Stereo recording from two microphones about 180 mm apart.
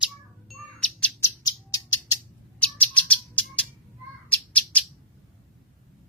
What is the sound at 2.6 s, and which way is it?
Bird, 10° left (ahead or behind).